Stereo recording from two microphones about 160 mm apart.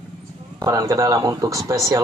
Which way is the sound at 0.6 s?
20° right (ahead or behind).